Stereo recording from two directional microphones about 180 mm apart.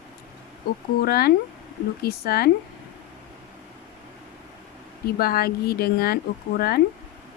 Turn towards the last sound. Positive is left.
turn(degrees=60)  # may be behind; listen again after turning